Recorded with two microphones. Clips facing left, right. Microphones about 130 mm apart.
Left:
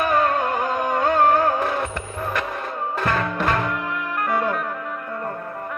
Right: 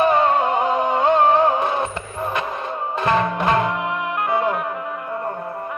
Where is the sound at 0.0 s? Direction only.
25° right (ahead or behind).